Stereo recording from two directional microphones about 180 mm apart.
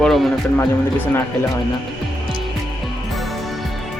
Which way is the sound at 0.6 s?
10° left (ahead or behind).